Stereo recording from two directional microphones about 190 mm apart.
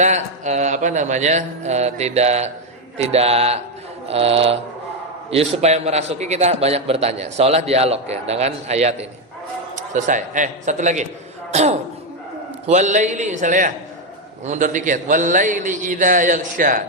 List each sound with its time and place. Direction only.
0.0 s a man's voice: 40° right (ahead or behind)